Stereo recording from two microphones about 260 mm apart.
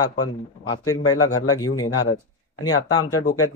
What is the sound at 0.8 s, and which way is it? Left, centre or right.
Speech, left.